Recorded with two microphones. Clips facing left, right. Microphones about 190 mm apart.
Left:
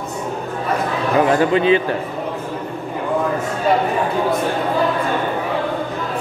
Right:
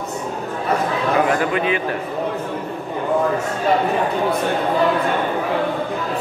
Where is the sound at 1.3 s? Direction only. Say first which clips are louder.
Left 5 dB; 30° left (ahead or behind).